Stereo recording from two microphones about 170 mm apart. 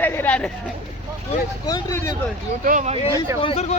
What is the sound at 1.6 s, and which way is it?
Speech, 20° left (ahead or behind).